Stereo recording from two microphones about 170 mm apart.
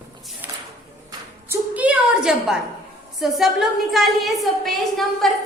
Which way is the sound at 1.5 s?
10° right (ahead or behind).